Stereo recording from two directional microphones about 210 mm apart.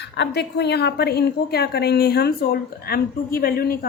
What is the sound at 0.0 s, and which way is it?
A woman's voice, 55° left (ahead or behind).